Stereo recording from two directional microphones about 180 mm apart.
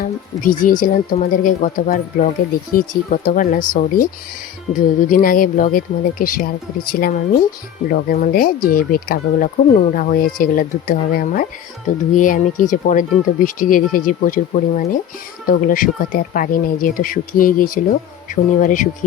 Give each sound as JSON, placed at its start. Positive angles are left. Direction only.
{"t": 0.4, "sound": "speech", "side_deg": 50}